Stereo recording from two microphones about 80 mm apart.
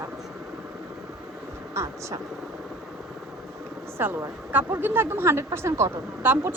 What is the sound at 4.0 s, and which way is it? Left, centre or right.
A woman's voice, right.